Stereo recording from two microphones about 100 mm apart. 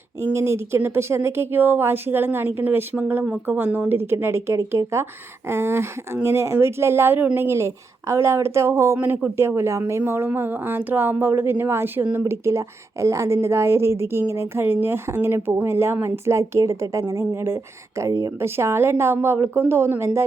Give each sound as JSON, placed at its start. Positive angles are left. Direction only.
{"t": 0.2, "sound": "a woman's voice", "side_deg": -25}